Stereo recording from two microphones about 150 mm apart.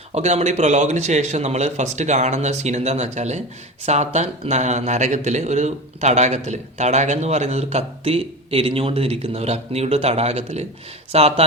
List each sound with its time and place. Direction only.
0.1 s speech: 45° right (ahead or behind)